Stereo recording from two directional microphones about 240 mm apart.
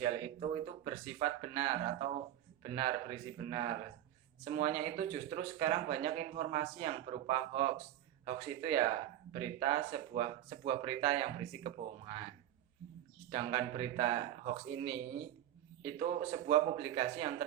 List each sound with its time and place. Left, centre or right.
0.0 s speech: right
13.3 s speech: right